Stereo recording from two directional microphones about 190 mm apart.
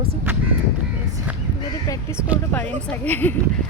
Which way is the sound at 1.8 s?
15° left (ahead or behind).